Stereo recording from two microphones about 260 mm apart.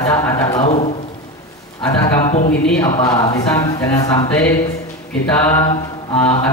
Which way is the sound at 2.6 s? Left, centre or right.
Centre.